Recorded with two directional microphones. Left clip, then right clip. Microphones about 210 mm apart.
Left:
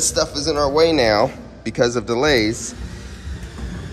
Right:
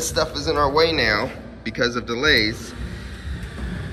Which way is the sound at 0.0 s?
20° left (ahead or behind).